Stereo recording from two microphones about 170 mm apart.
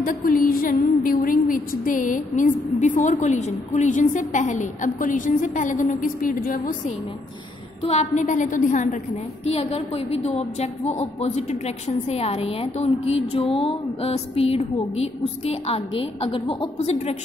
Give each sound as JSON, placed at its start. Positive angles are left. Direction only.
{"t": 0.0, "sound": "a woman's voice", "side_deg": 55}
{"t": 7.8, "sound": "a woman's voice", "side_deg": 40}
{"t": 9.5, "sound": "a woman's voice", "side_deg": 35}